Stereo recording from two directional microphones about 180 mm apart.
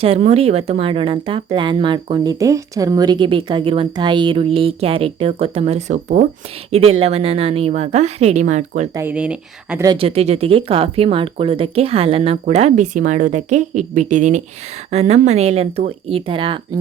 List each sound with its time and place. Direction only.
0.0 s speech: 35° right (ahead or behind)
9.0 s speech: 10° right (ahead or behind)
9.8 s speech: 30° right (ahead or behind)